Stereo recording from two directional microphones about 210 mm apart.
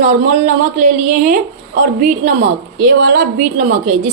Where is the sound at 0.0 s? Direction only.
35° right (ahead or behind).